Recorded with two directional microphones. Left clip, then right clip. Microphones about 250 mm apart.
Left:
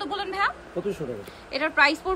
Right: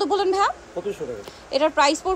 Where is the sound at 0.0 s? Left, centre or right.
Right.